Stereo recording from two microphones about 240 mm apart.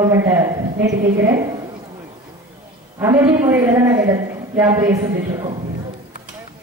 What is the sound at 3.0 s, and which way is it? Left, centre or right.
A man's voice, centre.